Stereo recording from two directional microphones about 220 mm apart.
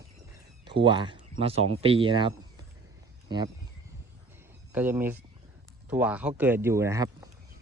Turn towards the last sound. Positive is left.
turn(degrees=-15)  # may be behind; listen again after turning